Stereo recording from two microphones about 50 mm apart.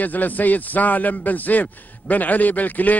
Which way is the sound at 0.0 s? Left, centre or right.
Left.